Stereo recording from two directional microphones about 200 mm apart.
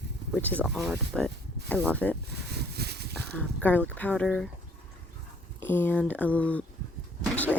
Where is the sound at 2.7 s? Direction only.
55° right (ahead or behind).